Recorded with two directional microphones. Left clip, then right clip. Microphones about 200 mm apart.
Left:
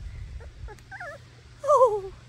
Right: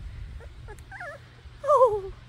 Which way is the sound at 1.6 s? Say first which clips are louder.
Even; 5° left (ahead or behind).